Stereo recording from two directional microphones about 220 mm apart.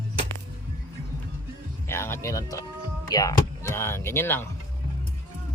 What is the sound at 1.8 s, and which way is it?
Speech, 10° left (ahead or behind).